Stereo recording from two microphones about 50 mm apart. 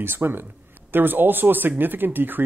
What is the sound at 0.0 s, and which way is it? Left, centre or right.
Speech, right.